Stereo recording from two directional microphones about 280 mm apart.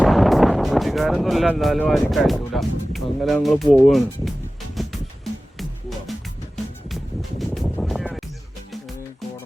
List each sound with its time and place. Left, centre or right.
0.0 s speech: centre
3.8 s music: centre
6.8 s music: centre